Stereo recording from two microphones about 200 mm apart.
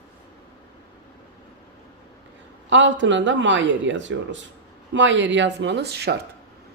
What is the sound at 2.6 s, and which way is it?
Speech, 65° right (ahead or behind).